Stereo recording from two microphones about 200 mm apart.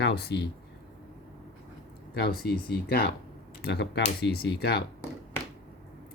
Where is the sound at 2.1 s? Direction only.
50° left (ahead or behind).